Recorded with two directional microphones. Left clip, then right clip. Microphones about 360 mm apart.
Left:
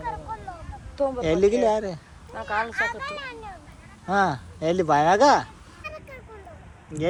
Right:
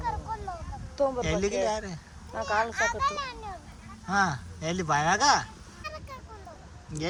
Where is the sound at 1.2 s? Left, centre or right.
Centre.